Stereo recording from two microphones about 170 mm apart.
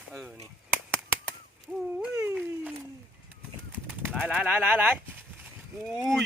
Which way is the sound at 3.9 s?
10° right (ahead or behind).